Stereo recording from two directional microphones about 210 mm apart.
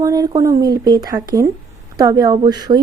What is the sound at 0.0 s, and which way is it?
A woman's voice, 15° right (ahead or behind).